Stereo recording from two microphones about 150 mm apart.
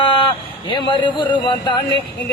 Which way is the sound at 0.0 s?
35° left (ahead or behind).